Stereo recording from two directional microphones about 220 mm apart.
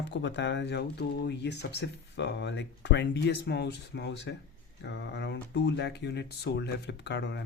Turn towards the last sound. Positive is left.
turn(degrees=50)  # may be behind; listen again after turning